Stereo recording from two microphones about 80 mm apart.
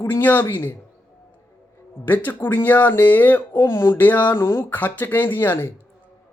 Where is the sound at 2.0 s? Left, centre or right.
Left.